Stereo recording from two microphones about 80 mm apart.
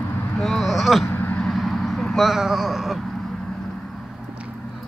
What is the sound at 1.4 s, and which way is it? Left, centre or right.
Vehicle, centre.